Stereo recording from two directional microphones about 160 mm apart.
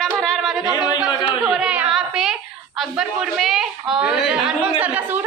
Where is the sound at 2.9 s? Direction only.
5° right (ahead or behind).